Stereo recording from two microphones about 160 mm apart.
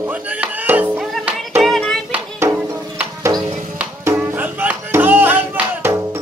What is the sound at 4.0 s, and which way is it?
Music, 15° right (ahead or behind).